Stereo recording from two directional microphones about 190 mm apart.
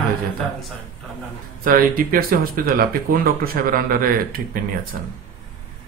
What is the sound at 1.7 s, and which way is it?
Speech, 45° right (ahead or behind).